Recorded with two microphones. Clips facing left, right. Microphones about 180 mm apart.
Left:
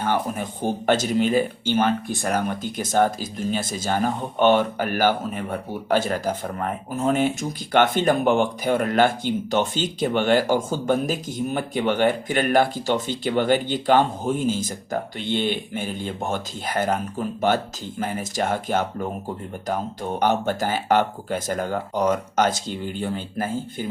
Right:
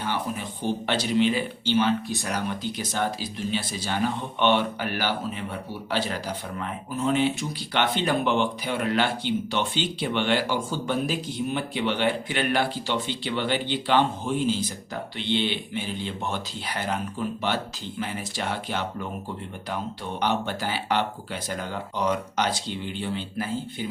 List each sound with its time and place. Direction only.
0.0 s speech: 50° left (ahead or behind)